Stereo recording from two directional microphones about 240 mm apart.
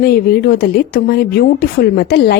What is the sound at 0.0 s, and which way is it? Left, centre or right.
A woman's voice, left.